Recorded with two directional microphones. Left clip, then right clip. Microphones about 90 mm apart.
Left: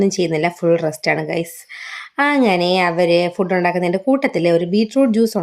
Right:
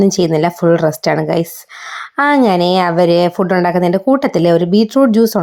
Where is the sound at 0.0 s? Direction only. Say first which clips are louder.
Right 5 dB; 45° right (ahead or behind).